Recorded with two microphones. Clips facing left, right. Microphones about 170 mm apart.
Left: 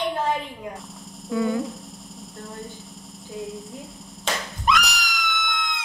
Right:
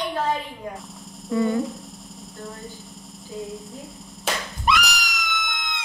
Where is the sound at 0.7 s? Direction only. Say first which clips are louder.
Even; centre (ahead or behind).